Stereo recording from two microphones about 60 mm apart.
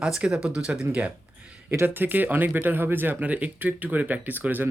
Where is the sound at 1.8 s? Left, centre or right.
Right.